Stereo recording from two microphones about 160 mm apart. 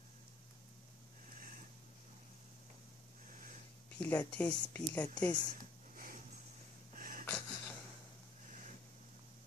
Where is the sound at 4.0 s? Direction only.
10° left (ahead or behind).